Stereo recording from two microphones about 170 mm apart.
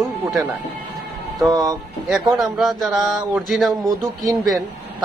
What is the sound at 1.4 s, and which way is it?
Speech, 20° right (ahead or behind).